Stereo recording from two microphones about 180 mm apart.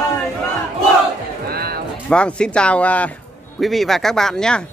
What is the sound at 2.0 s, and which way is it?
Speech, 5° left (ahead or behind).